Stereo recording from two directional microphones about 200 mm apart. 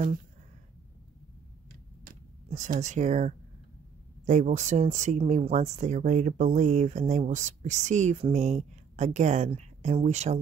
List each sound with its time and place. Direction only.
2.0 s speech: 40° right (ahead or behind)